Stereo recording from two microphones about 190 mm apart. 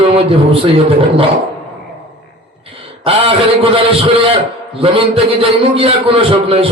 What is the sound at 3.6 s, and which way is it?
Speech, 30° right (ahead or behind).